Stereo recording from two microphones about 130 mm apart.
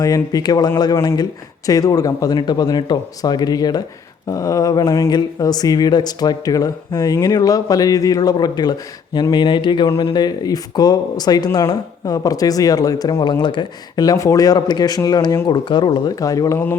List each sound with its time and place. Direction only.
0.0 s speech: 30° left (ahead or behind)